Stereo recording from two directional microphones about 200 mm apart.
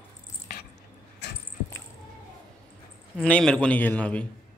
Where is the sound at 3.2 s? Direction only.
5° left (ahead or behind).